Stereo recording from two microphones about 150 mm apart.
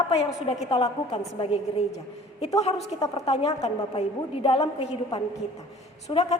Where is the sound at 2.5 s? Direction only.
45° left (ahead or behind).